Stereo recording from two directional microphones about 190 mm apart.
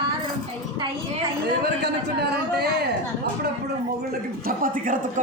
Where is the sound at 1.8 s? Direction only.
60° right (ahead or behind).